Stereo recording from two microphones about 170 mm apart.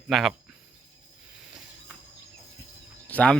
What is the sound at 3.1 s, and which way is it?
Speech, 10° left (ahead or behind).